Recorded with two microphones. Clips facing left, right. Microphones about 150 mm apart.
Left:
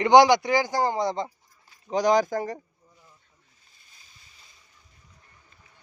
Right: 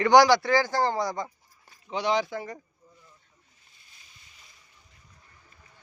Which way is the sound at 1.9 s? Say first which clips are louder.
Left 5 dB; 40° left (ahead or behind).